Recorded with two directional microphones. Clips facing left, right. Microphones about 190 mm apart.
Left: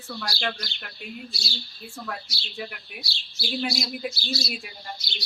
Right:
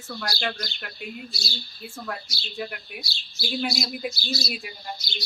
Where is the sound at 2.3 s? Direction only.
45° right (ahead or behind).